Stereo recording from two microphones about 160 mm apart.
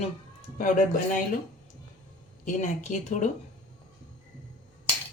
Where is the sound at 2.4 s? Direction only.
50° left (ahead or behind).